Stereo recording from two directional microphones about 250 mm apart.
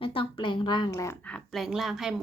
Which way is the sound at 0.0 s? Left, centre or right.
Left.